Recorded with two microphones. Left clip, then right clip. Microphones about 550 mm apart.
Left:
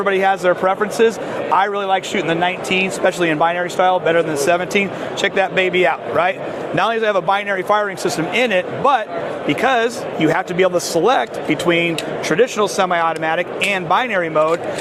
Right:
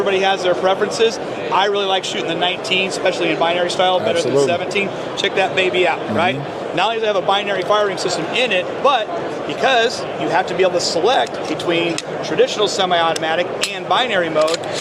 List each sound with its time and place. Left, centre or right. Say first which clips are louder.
0.0 s speech: left 1 dB; left
12.4 s speech: right 1 dB; left